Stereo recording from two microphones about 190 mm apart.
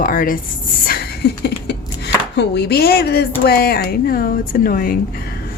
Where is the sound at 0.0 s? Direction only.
45° left (ahead or behind).